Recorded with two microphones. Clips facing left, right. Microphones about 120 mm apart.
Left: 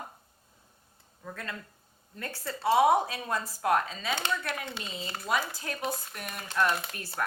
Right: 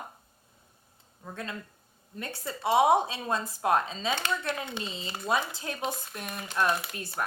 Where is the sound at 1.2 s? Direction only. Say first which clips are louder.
Right 2 dB; 20° right (ahead or behind).